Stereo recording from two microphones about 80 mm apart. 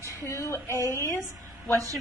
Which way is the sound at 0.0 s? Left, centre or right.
Left.